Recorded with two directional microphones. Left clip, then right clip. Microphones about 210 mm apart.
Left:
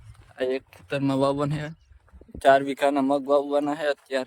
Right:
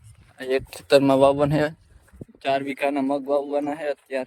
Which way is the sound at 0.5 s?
15° right (ahead or behind).